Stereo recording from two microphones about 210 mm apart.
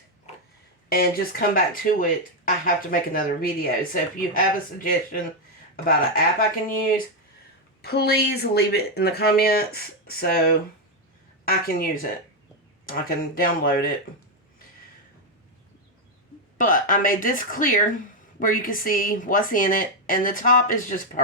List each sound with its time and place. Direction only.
0.9 s speech: 45° left (ahead or behind)
16.6 s speech: 40° left (ahead or behind)